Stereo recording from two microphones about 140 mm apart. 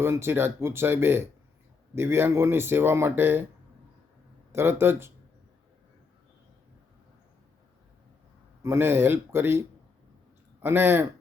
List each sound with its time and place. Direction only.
0.0 s speech: 20° right (ahead or behind)
4.5 s speech: 15° right (ahead or behind)
8.6 s speech: 15° right (ahead or behind)